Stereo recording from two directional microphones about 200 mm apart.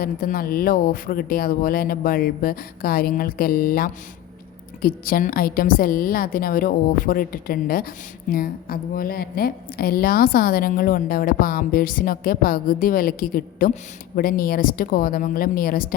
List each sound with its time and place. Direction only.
0.0 s a woman's voice: 45° left (ahead or behind)